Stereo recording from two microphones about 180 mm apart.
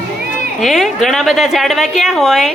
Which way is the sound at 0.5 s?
Centre (ahead or behind).